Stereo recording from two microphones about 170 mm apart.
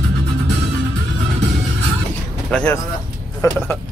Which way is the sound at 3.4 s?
20° left (ahead or behind).